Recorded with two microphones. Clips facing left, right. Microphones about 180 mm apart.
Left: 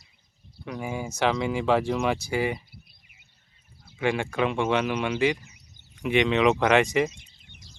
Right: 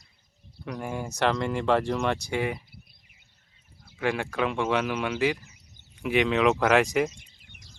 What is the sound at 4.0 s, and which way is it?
Speech, centre (ahead or behind).